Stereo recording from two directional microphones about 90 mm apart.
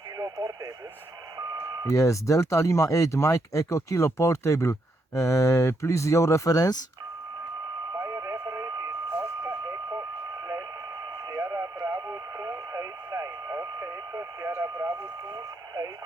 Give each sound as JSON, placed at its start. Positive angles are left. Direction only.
{"t": 0.2, "sound": "speech", "side_deg": -40}
{"t": 1.9, "sound": "speech", "side_deg": 35}
{"t": 7.9, "sound": "a sound", "side_deg": -35}
{"t": 9.1, "sound": "vehicle", "side_deg": -30}
{"t": 11.3, "sound": "radio", "side_deg": -35}
{"t": 15.4, "sound": "vehicle", "side_deg": -40}